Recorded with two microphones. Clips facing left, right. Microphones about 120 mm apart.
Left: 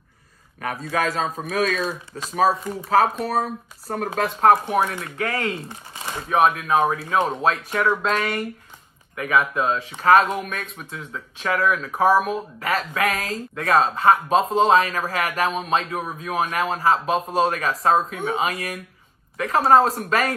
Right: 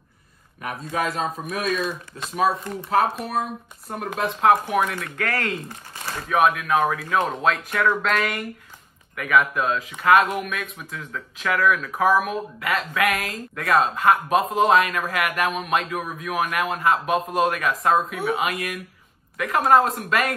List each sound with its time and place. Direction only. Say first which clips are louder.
1.0 s speech: left 2 dB; 40° left (ahead or behind)
1.5 s speech: left 4 dB; 90° left
2.1 s speech: left 2 dB; 40° left (ahead or behind)
2.7 s speech: left 2 dB; 5° left (ahead or behind)
3.3 s speech: left 3 dB; 35° left (ahead or behind)
4.9 s speech: left 1 dB; 20° left (ahead or behind)